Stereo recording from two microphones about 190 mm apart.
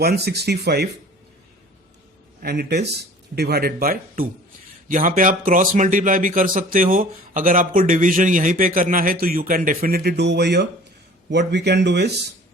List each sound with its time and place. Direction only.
0.0 s speech: 55° right (ahead or behind)
2.4 s a man's voice: 55° right (ahead or behind)